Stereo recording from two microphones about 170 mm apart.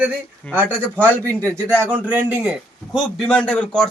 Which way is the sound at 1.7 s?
10° right (ahead or behind).